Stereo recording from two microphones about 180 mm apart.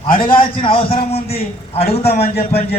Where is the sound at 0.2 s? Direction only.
30° left (ahead or behind).